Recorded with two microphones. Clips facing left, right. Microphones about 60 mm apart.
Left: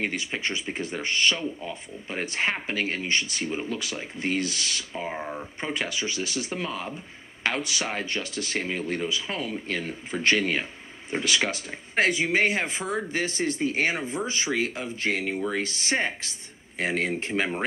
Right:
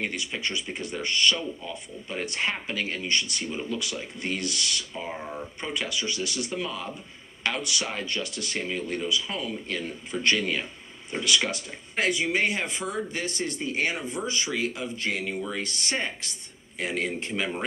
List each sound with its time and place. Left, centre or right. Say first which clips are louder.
0.0 s speech: left 2 dB; left
7.4 s speech: left 1 dB; left
16.7 s speech: left 3 dB; left